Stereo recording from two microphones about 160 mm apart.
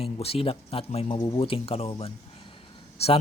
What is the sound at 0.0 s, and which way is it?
A man's voice, 35° left (ahead or behind).